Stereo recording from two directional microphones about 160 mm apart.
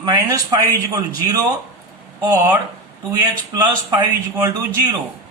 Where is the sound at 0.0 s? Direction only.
25° right (ahead or behind).